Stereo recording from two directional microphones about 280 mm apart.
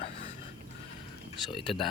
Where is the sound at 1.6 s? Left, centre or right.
Centre.